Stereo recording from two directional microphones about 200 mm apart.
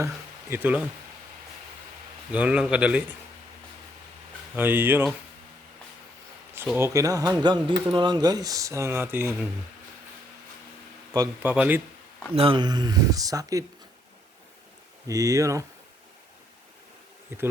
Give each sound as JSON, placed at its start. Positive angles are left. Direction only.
{"t": 0.5, "sound": "speech", "side_deg": -10}
{"t": 2.3, "sound": "speech", "side_deg": -5}
{"t": 4.5, "sound": "speech", "side_deg": -10}
{"t": 6.5, "sound": "speech", "side_deg": -10}
{"t": 11.1, "sound": "speech", "side_deg": -20}
{"t": 11.5, "sound": "speech", "side_deg": -5}
{"t": 12.3, "sound": "speech", "side_deg": -25}
{"t": 15.0, "sound": "speech", "side_deg": -15}